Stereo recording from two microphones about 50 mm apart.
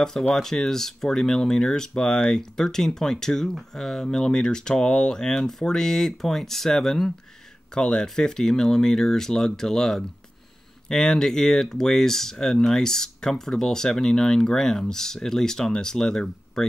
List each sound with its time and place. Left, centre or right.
0.3 s speech: centre